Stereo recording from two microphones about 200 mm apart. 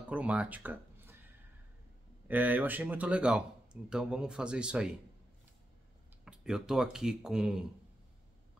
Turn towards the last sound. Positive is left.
turn(degrees=-5)  # may be behind; listen again after turning